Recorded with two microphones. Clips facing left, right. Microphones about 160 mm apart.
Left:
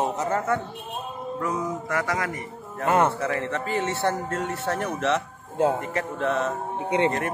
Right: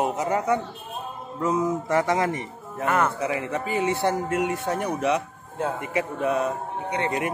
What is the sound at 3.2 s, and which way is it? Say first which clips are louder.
Music: even; 15° right (ahead or behind).